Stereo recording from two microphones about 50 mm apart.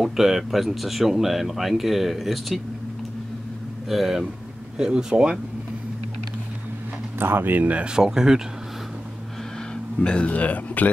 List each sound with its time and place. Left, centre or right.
0.0 s speech: centre
3.9 s speech: centre
4.7 s speech: centre
7.2 s speech: right
7.9 s speech: centre
9.9 s speech: left